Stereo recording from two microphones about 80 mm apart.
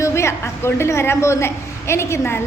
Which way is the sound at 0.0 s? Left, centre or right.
Left.